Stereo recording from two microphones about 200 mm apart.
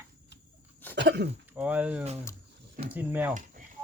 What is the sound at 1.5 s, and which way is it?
Speech, 5° right (ahead or behind).